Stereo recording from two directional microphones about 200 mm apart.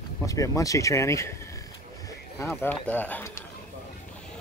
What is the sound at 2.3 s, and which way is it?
Speech, 10° left (ahead or behind).